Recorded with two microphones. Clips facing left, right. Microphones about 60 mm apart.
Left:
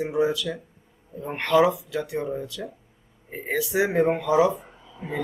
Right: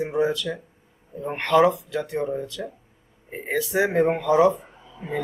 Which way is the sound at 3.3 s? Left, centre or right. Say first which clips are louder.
Even; centre.